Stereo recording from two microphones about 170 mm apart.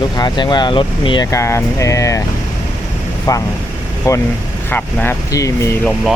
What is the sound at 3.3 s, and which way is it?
Speech, 20° left (ahead or behind).